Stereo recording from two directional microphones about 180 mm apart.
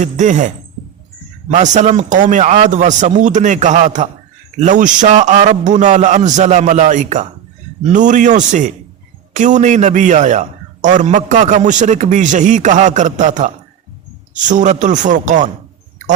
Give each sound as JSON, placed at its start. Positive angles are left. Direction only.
{"t": 0.0, "sound": "a man's voice", "side_deg": -40}